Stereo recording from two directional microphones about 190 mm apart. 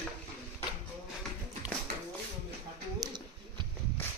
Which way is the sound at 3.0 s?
25° right (ahead or behind).